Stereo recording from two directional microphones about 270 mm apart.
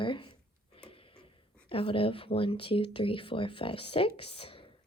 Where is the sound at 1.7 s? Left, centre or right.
Centre.